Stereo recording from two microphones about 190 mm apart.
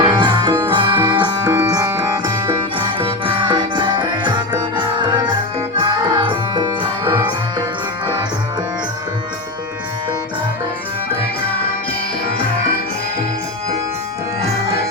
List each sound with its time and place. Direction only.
0.0 s music: 25° right (ahead or behind)